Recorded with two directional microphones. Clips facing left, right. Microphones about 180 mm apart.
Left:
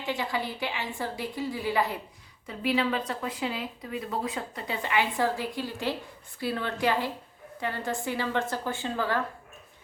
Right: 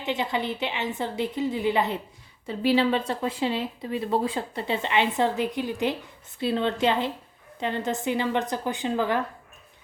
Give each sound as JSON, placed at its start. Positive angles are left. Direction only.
{"t": 0.0, "sound": "speech", "side_deg": -20}